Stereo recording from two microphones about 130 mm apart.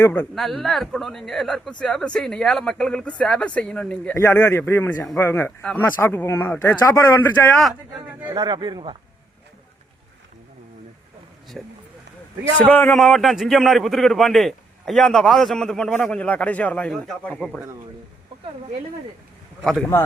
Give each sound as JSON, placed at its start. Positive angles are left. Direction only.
{"t": 0.0, "sound": "speech", "side_deg": 15}
{"t": 0.3, "sound": "a man's voice", "side_deg": 0}
{"t": 8.3, "sound": "speech", "side_deg": -35}
{"t": 11.6, "sound": "a man's voice", "side_deg": 0}
{"t": 12.9, "sound": "a man's voice", "side_deg": 0}
{"t": 19.8, "sound": "speech", "side_deg": 20}